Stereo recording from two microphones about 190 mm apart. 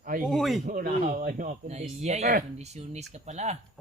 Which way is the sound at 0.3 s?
Centre (ahead or behind).